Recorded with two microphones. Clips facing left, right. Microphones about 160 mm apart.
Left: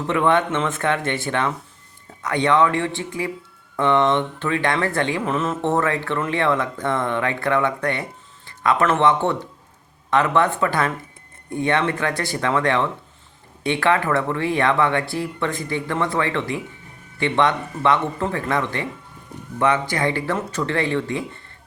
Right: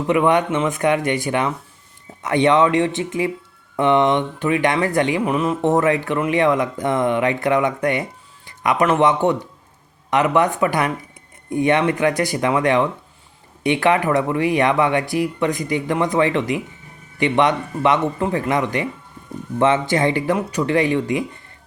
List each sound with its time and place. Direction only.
0.1 s speech: 15° right (ahead or behind)